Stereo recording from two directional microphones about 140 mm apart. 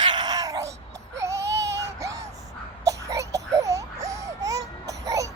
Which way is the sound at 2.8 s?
25° right (ahead or behind).